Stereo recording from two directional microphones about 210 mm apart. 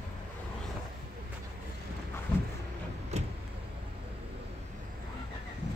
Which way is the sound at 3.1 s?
30° right (ahead or behind).